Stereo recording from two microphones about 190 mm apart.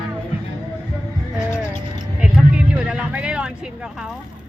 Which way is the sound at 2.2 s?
5° right (ahead or behind).